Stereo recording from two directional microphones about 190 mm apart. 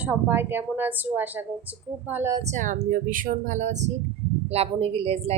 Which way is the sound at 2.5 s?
40° right (ahead or behind).